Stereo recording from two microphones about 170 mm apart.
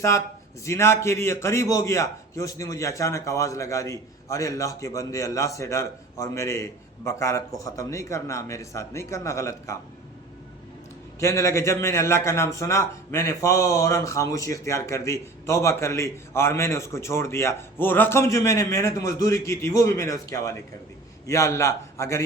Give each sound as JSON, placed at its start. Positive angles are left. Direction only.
{"t": 0.6, "sound": "a man's voice", "side_deg": 15}
{"t": 11.2, "sound": "a man's voice", "side_deg": 15}